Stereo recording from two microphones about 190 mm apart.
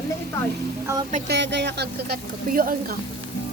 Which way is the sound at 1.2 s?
65° right (ahead or behind).